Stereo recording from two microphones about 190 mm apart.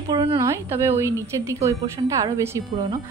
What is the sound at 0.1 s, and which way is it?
Speech, 25° right (ahead or behind).